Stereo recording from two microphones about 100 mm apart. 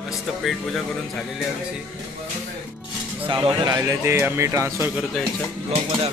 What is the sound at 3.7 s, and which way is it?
Speech, 35° right (ahead or behind).